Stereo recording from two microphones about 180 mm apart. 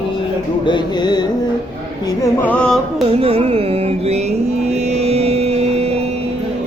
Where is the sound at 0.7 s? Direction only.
25° left (ahead or behind).